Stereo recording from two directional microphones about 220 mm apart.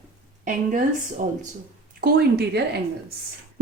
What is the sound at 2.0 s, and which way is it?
Speech, 45° right (ahead or behind).